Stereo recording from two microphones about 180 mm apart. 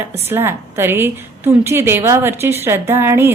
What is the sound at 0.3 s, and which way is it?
A woman's voice, 15° right (ahead or behind).